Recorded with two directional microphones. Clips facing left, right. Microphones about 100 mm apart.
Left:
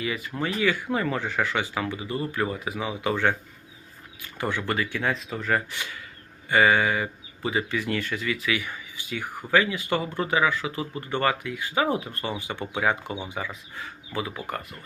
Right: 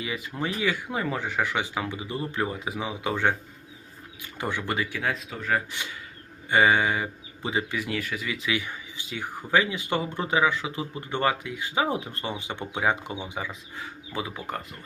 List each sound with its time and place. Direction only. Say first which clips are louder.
0.0 s speech: left 2 dB; 20° right (ahead or behind)
4.9 s speech: left 2 dB; 5° right (ahead or behind)
5.7 s speech: left 1 dB; 20° right (ahead or behind)